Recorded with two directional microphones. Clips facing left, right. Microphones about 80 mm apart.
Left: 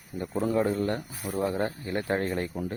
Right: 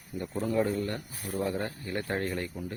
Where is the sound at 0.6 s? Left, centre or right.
Left.